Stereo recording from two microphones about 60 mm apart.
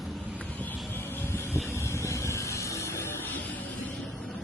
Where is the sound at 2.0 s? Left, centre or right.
Left.